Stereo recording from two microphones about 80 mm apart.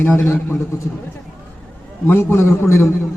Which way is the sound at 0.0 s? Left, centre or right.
Left.